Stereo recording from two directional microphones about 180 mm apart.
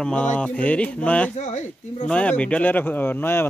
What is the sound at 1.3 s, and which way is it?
Speech, 40° left (ahead or behind).